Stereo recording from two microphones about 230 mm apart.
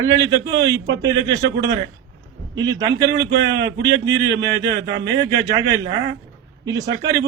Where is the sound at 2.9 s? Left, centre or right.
Right.